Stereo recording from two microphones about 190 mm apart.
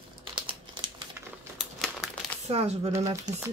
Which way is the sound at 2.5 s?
30° right (ahead or behind).